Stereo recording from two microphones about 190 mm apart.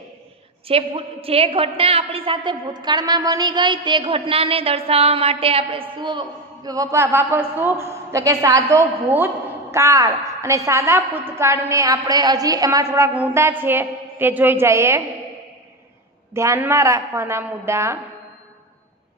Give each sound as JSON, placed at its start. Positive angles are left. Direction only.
{"t": 0.7, "sound": "a woman's voice", "side_deg": -30}
{"t": 16.3, "sound": "a woman's voice", "side_deg": -15}